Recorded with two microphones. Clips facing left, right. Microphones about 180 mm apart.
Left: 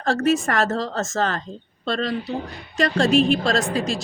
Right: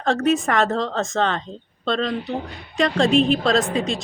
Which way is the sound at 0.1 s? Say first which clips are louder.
Right 1 dB; centre (ahead or behind).